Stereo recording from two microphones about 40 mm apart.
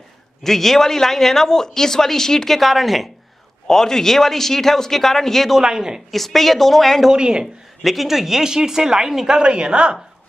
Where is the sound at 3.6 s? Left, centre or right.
Centre.